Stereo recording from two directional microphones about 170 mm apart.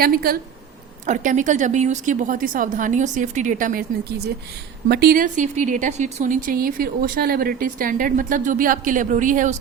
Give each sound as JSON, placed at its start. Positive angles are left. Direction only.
{"t": 0.0, "sound": "speech", "side_deg": -60}
{"t": 1.0, "sound": "a woman's voice", "side_deg": -50}
{"t": 4.9, "sound": "a woman's voice", "side_deg": -65}